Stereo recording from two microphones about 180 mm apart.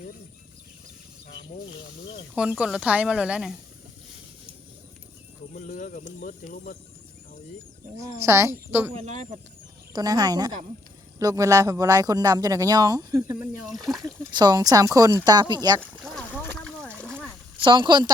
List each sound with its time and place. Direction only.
2.3 s speech: 5° right (ahead or behind)
5.5 s speech: 45° left (ahead or behind)
7.9 s speech: 15° right (ahead or behind)
9.0 s speech: 40° right (ahead or behind)
9.9 s a man's voice: 20° right (ahead or behind)
15.8 s speech: centre (ahead or behind)
16.4 s a sound: 5° left (ahead or behind)
17.6 s a man's voice: 25° right (ahead or behind)